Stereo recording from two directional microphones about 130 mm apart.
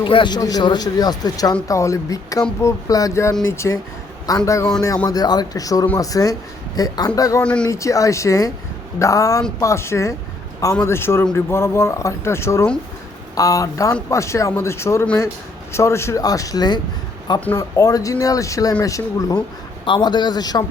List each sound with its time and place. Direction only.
0.0 s a man's voice: 40° left (ahead or behind)